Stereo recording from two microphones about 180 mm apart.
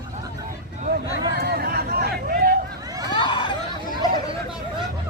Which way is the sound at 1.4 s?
60° right (ahead or behind).